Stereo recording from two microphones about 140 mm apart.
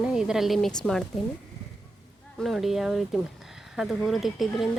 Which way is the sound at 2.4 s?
Centre (ahead or behind).